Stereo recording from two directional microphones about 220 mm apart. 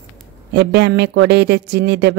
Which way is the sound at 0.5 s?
50° right (ahead or behind).